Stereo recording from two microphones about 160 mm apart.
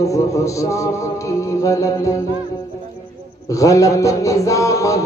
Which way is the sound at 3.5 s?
20° left (ahead or behind).